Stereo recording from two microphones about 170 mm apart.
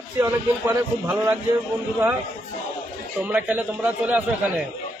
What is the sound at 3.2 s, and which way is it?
A man's voice, 10° right (ahead or behind).